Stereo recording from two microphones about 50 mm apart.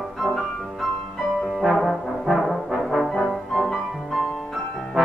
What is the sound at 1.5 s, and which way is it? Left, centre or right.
Brass instrument, centre.